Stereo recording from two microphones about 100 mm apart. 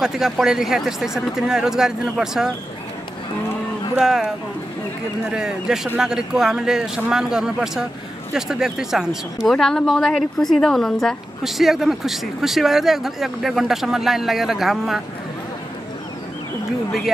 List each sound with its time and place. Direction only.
0.0 s speech: 5° right (ahead or behind)
3.9 s speech: 5° right (ahead or behind)
5.3 s speech: 5° right (ahead or behind)